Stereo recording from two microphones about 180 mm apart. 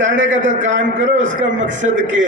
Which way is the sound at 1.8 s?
40° right (ahead or behind).